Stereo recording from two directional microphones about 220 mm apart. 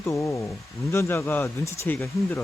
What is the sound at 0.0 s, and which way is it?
Speech, 10° left (ahead or behind).